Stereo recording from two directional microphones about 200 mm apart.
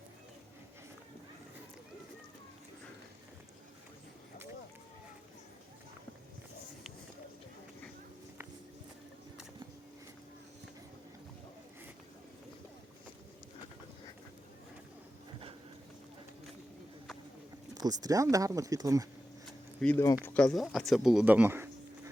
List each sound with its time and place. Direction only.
17.7 s speech: 20° right (ahead or behind)
19.5 s a sound: 5° left (ahead or behind)
20.2 s speech: 5° left (ahead or behind); by 22.1 s 10° right (ahead or behind)